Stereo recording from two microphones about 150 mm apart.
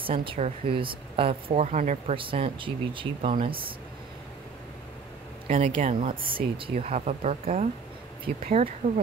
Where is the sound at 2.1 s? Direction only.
40° right (ahead or behind).